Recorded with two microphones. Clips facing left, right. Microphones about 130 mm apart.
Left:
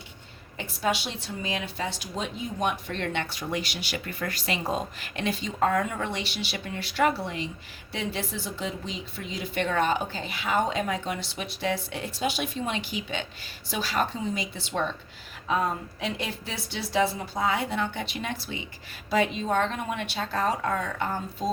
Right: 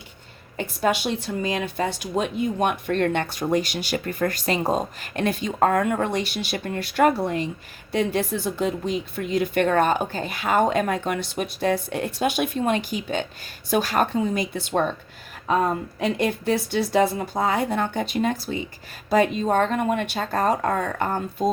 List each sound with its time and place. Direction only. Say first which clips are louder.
0.5 s speech: right 5 dB; 50° right (ahead or behind)